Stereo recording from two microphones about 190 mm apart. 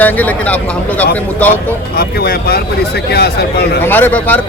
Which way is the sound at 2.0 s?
55° left (ahead or behind).